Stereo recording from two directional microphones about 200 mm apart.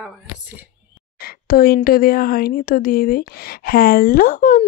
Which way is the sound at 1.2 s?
50° left (ahead or behind).